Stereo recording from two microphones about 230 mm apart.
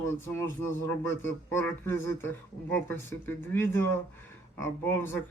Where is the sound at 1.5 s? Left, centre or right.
Centre.